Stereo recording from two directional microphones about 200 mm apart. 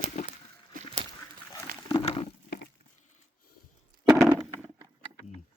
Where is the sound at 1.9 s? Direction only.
30° left (ahead or behind).